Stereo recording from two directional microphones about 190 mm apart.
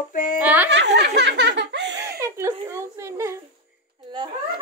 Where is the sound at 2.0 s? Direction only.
15° right (ahead or behind).